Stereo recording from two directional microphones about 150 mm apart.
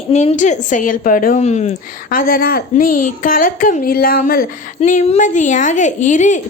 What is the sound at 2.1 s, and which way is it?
Speech, 75° left (ahead or behind).